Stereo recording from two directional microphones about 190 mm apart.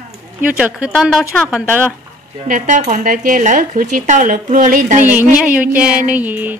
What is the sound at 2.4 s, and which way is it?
Speech, 45° right (ahead or behind).